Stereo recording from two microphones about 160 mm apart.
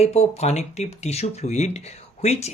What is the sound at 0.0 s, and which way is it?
Speech, 40° left (ahead or behind).